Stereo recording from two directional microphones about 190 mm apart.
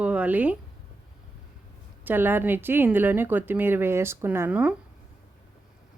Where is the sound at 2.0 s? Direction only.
10° right (ahead or behind).